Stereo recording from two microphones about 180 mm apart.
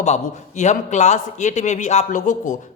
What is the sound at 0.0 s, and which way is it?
A man's voice, 40° left (ahead or behind).